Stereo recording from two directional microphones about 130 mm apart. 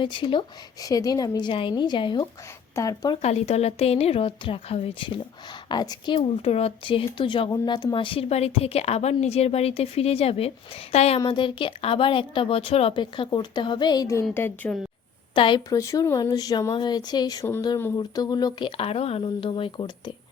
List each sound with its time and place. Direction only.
0.0 s a woman's voice: 40° left (ahead or behind)
0.9 s a woman's voice: 30° left (ahead or behind)
3.2 s a woman's voice: 55° left (ahead or behind)
11.3 s a woman's voice: 40° left (ahead or behind)
14.3 s a woman's voice: 15° left (ahead or behind)
15.4 s a woman's voice: 40° left (ahead or behind)
15.7 s a woman's voice: 25° left (ahead or behind)
18.8 s a woman's voice: 50° left (ahead or behind)